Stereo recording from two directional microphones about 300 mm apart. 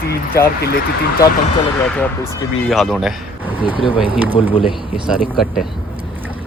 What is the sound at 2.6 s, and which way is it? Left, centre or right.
Speech, centre.